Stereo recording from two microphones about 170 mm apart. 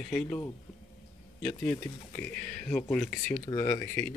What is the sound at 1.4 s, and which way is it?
Speech, 10° left (ahead or behind).